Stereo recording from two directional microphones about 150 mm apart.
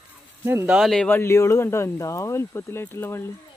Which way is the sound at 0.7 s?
Centre (ahead or behind).